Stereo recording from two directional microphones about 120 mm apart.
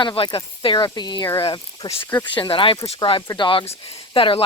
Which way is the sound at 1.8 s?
40° left (ahead or behind).